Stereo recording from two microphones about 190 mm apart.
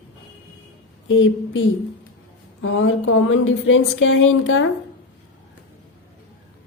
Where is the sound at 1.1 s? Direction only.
90° left.